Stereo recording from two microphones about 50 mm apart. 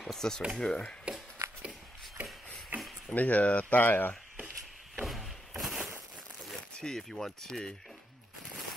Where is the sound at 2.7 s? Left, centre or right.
Right.